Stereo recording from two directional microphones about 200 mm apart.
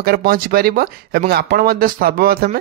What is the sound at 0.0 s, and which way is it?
Speech, 50° right (ahead or behind).